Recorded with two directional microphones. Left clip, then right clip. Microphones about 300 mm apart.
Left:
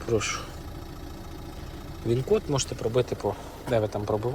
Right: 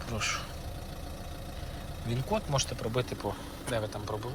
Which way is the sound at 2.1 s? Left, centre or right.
Centre.